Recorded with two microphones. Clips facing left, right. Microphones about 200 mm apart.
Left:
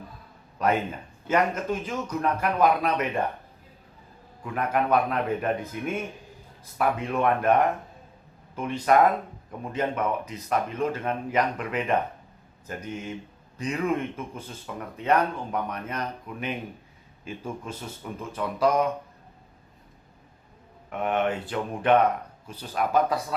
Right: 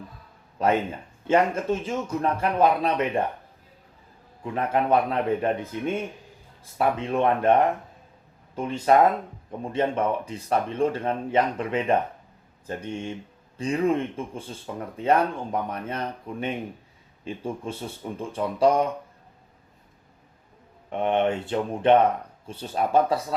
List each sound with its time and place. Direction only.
0.6 s speech: 25° right (ahead or behind)
4.4 s speech: 30° right (ahead or behind)
20.9 s speech: 30° right (ahead or behind)